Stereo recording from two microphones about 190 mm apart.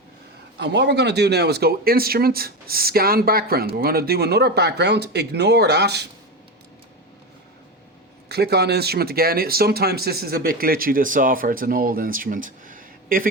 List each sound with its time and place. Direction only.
0.6 s speech: 65° right (ahead or behind)
8.3 s speech: 60° right (ahead or behind)